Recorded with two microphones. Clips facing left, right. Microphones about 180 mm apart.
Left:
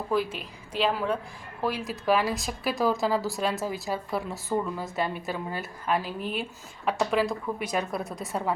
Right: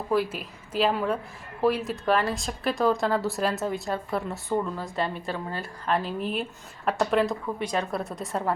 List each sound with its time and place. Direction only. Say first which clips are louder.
0.1 s speech: right 3 dB; centre (ahead or behind)